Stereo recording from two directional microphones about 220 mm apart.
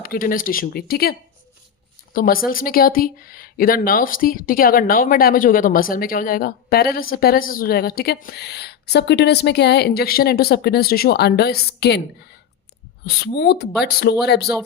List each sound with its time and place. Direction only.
0.0 s speech: 40° left (ahead or behind)
2.1 s speech: 40° left (ahead or behind)
13.1 s speech: 45° left (ahead or behind)